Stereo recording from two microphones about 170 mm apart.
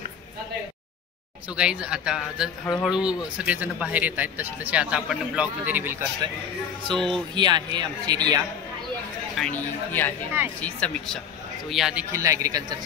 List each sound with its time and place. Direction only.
1.5 s speech: 5° right (ahead or behind)
6.9 s speech: 5° left (ahead or behind)
7.3 s speech: 25° right (ahead or behind)
9.4 s speech: 10° left (ahead or behind)
11.7 s speech: 5° right (ahead or behind); by 12.7 s 20° right (ahead or behind)